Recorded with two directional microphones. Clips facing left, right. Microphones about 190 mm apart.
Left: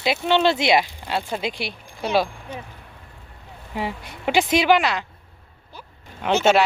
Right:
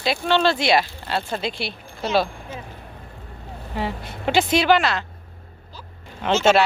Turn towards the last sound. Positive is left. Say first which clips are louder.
# even
turn(degrees=15)  # may be behind; listen again after turning